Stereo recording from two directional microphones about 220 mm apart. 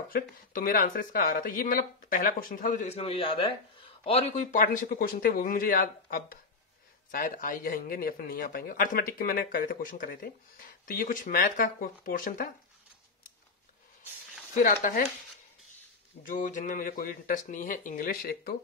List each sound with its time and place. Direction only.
0.1 s a man's voice: 40° left (ahead or behind)
14.6 s a man's voice: 40° left (ahead or behind)
16.3 s a man's voice: 35° left (ahead or behind)